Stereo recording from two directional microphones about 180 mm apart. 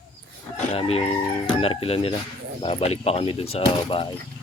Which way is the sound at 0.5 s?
35° left (ahead or behind).